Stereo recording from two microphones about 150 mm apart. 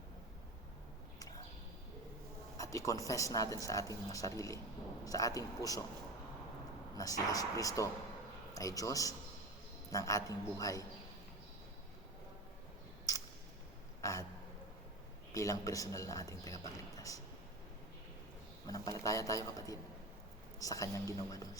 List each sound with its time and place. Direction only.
2.6 s a woman's voice: 20° left (ahead or behind)
6.9 s a woman's voice: 25° left (ahead or behind)
14.0 s speech: 20° left (ahead or behind)
15.3 s a woman's voice: 25° left (ahead or behind)
18.7 s a woman's voice: 25° left (ahead or behind)